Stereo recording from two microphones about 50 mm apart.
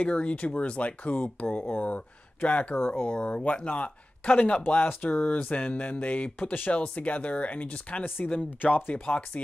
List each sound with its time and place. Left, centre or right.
0.0 s speech: left
8.5 s speech: left
9.0 s speech: left